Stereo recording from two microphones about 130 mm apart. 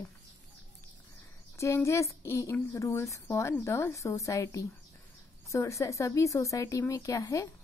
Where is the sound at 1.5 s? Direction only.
25° left (ahead or behind).